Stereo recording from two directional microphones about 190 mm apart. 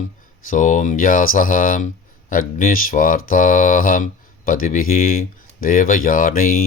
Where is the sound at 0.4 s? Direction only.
45° left (ahead or behind).